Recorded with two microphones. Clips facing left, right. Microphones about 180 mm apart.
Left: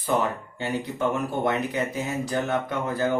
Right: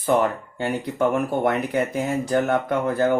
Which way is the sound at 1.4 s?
55° right (ahead or behind).